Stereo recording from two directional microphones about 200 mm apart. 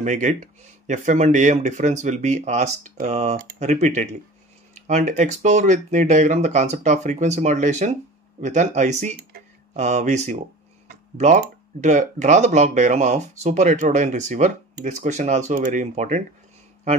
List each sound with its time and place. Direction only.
0.0 s speech: 35° right (ahead or behind)